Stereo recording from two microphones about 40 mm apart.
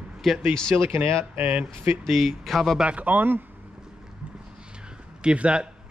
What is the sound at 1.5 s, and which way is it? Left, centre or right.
Speech, right.